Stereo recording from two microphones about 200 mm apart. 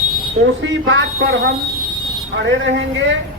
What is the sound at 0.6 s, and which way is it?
Speech, 65° right (ahead or behind).